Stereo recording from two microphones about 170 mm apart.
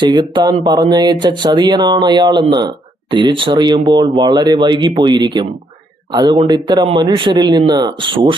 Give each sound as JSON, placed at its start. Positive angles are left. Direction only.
{"t": 0.0, "sound": "speech", "side_deg": -25}